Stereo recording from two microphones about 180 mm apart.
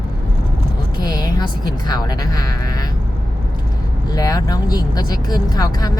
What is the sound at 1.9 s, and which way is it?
Speech, 20° left (ahead or behind).